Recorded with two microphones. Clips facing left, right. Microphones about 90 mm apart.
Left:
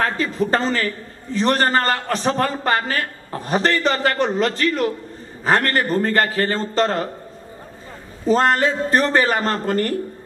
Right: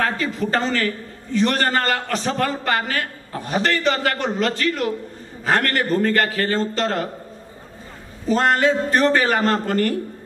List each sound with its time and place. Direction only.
0.0 s a man's voice: 35° left (ahead or behind)
8.3 s a man's voice: 35° left (ahead or behind)